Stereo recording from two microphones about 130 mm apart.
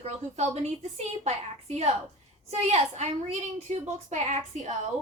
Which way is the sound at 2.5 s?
55° right (ahead or behind).